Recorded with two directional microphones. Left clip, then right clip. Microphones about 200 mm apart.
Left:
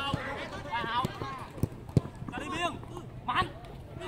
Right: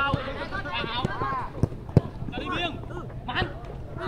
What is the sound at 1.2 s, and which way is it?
Clip-clop, 50° left (ahead or behind).